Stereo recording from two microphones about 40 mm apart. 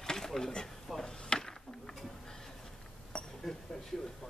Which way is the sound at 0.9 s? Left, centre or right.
Centre.